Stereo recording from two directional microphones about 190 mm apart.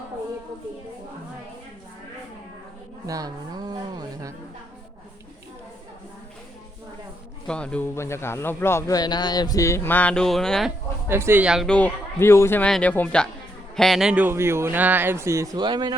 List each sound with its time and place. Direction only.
3.1 s music: 20° right (ahead or behind)
7.4 s a man's voice: 5° left (ahead or behind)
11.1 s a man's voice: 10° right (ahead or behind)